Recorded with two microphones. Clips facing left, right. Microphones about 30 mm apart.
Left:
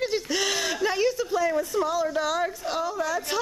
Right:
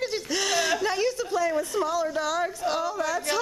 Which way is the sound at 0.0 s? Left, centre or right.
Centre.